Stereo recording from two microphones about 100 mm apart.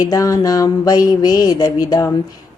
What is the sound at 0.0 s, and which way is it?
A woman's voice, 35° left (ahead or behind).